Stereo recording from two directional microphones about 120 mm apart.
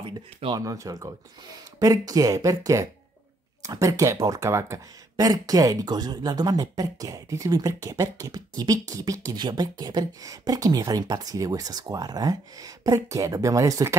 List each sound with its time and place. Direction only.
0.0 s speech: 45° right (ahead or behind)
0.6 s speech: 30° right (ahead or behind)